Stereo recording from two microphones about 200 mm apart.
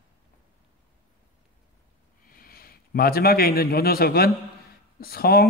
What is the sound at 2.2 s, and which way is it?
A man's voice, 45° left (ahead or behind).